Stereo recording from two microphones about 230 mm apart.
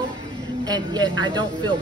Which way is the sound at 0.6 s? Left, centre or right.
Centre.